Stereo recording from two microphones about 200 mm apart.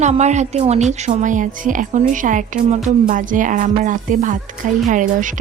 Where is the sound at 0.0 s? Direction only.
35° right (ahead or behind).